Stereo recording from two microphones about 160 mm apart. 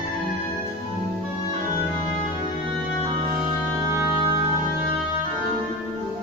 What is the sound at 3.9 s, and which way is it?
Music, 15° right (ahead or behind).